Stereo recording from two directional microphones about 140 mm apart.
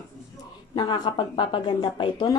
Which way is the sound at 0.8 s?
35° left (ahead or behind).